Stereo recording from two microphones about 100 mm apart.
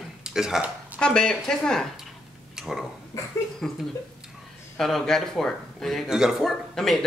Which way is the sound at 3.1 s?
30° left (ahead or behind).